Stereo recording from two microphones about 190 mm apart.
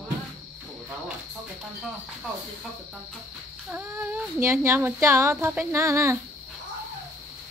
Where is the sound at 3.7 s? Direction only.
10° right (ahead or behind).